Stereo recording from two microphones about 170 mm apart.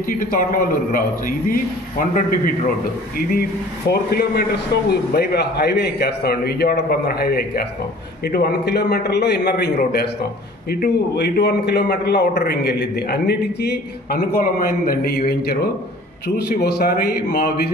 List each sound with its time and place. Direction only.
0.2 s a man's voice: 55° left (ahead or behind)
3.2 s a man's voice: 65° left (ahead or behind)
10.7 s a man's voice: 70° left (ahead or behind)
14.3 s a man's voice: 60° left (ahead or behind)